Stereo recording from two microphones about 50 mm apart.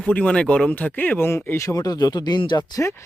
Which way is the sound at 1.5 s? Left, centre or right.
Left.